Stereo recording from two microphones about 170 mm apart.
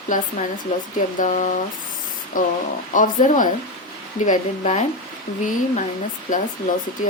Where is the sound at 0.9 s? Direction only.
50° left (ahead or behind).